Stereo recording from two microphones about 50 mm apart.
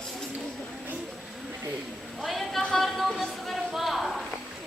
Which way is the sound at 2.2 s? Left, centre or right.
Centre.